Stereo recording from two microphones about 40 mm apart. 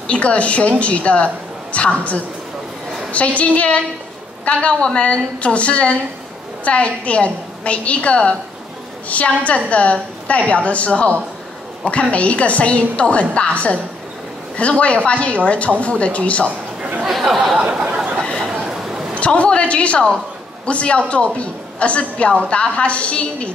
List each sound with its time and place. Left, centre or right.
0.0 s a woman's voice: left
16.4 s a sound: right
17.1 s speech: centre
17.7 s chatter: right
18.7 s a sound: centre
19.1 s a woman's voice: left